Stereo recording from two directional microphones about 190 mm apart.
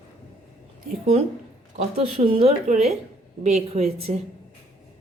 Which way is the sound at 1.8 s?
35° right (ahead or behind).